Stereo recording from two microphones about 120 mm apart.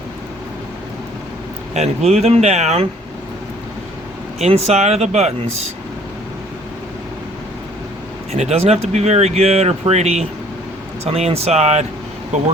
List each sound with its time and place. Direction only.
1.7 s speech: 65° right (ahead or behind)
4.4 s speech: 60° right (ahead or behind)
8.3 s speech: 65° right (ahead or behind)